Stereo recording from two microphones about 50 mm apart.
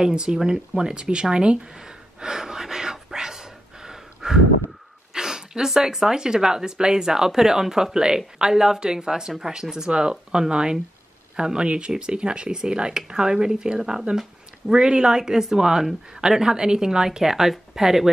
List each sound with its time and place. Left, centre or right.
0.0 s speech: centre
1.3 s gasp: centre
8.4 s speech: centre